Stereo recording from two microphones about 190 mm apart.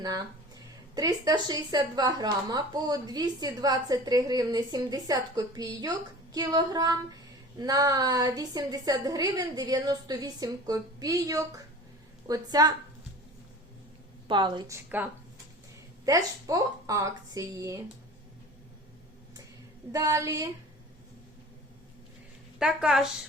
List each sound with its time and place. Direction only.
0.0 s a woman's voice: 20° right (ahead or behind)
14.3 s a woman's voice: 25° right (ahead or behind)
16.0 s a woman's voice: 20° right (ahead or behind)
19.9 s a woman's voice: 15° right (ahead or behind)
22.5 s a woman's voice: 5° right (ahead or behind)